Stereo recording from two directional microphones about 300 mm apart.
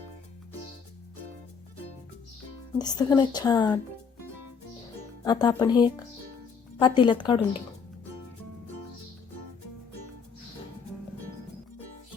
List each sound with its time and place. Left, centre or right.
2.7 s a woman's voice: centre
5.2 s a woman's voice: centre